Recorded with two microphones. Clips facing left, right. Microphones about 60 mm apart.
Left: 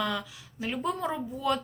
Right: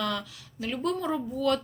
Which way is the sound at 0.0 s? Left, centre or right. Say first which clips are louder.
Even; centre.